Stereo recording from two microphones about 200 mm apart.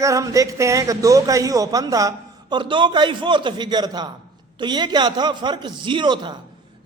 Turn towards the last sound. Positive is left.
turn(degrees=-20)  # may be behind; listen again after turning